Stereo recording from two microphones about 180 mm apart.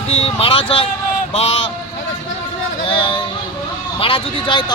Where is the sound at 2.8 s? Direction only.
30° left (ahead or behind).